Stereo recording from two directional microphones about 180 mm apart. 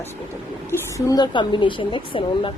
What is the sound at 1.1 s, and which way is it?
A woman's voice, 25° left (ahead or behind).